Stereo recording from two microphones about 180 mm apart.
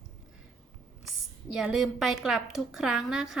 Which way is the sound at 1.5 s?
Centre (ahead or behind).